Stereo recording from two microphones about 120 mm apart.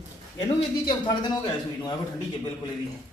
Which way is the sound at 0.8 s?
40° left (ahead or behind).